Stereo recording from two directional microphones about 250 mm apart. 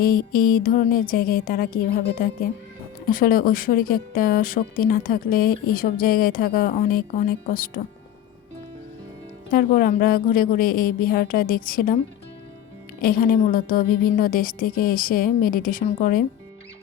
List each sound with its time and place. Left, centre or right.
0.0 s a woman's voice: left
9.5 s a woman's voice: left
13.0 s a woman's voice: left